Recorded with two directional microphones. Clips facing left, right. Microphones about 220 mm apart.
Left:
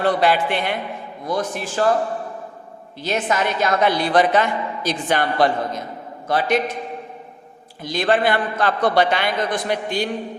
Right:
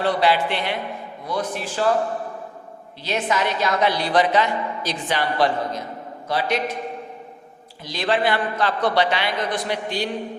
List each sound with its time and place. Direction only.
0.0 s a woman's voice: 50° left (ahead or behind)
3.0 s a woman's voice: 50° left (ahead or behind)
7.9 s a woman's voice: 50° left (ahead or behind)